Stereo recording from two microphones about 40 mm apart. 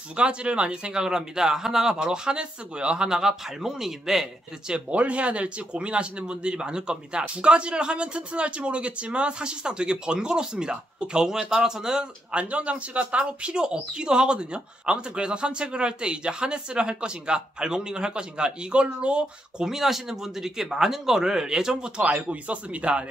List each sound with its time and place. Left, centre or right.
0.1 s speech: right
1.0 s speech: centre
4.9 s speech: right
19.6 s speech: centre
22.0 s speech: right